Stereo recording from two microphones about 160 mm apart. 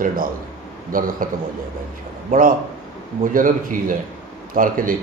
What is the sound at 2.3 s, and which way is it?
A man's voice, 60° right (ahead or behind).